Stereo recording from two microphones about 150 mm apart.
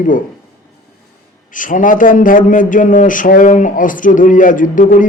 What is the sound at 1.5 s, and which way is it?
A man's voice, 60° left (ahead or behind).